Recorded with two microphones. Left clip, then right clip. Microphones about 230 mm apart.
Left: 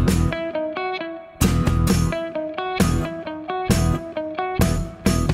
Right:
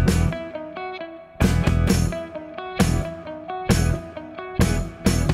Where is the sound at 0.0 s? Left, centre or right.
Centre.